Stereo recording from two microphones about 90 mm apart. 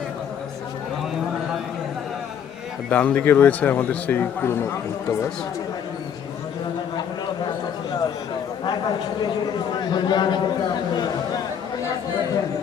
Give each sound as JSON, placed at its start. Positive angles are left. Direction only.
{"t": 2.9, "sound": "speech", "side_deg": 15}
{"t": 9.9, "sound": "a man's voice", "side_deg": 55}